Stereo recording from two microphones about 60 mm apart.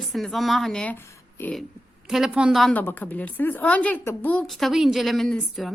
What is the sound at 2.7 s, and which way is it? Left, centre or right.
A woman's voice, left.